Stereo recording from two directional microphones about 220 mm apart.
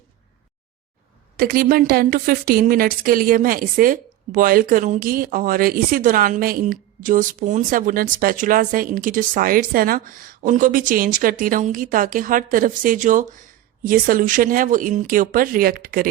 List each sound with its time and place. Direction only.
1.4 s a woman's voice: 40° right (ahead or behind)